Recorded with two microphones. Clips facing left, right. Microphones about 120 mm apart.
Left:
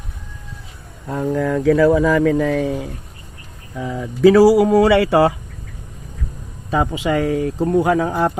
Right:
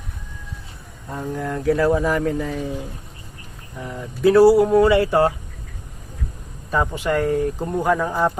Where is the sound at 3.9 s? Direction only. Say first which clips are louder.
Left 4 dB; 90° left.